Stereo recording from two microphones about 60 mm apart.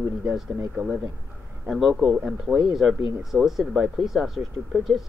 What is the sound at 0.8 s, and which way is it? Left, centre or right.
Speech, centre.